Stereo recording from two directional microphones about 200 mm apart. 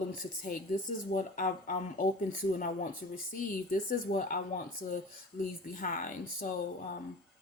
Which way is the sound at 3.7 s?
45° left (ahead or behind).